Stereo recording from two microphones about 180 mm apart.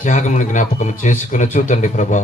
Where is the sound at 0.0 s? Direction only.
45° left (ahead or behind).